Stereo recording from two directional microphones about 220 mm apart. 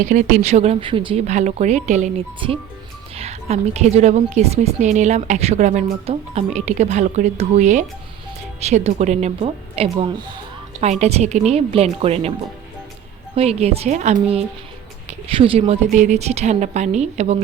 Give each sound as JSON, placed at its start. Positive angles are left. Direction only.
{"t": 0.0, "sound": "a woman's voice", "side_deg": -35}
{"t": 13.3, "sound": "a woman's voice", "side_deg": -30}